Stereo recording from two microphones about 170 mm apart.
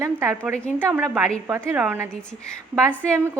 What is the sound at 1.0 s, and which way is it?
A woman's voice, centre (ahead or behind).